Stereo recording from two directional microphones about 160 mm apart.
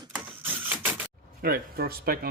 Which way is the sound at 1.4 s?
70° right (ahead or behind).